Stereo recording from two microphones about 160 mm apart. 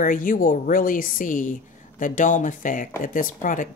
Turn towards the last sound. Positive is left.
turn(degrees=55)  # may be behind; listen again after turning